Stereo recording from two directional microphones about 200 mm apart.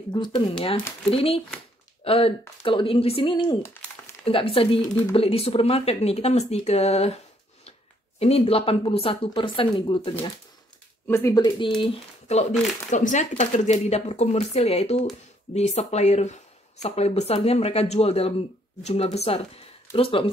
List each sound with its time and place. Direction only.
0.1 s a woman's voice: 25° left (ahead or behind)
8.2 s a woman's voice: 30° left (ahead or behind)
11.8 s a woman's voice: 35° left (ahead or behind)